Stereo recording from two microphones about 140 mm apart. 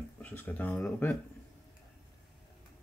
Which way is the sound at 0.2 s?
10° left (ahead or behind).